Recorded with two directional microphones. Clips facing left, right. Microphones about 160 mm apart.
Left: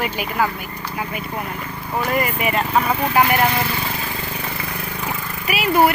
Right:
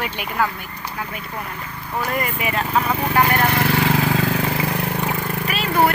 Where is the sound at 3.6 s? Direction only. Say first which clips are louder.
Right 6 dB; 85° right.